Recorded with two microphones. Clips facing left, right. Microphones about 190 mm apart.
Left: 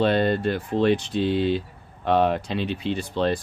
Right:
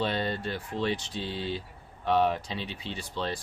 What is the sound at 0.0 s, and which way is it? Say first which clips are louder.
Speech: left 9 dB; 60° left (ahead or behind).